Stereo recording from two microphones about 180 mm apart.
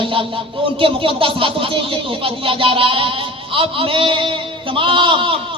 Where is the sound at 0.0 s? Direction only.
30° right (ahead or behind).